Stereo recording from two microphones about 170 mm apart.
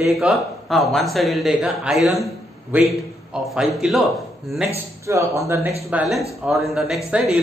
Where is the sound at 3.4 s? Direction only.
Centre (ahead or behind).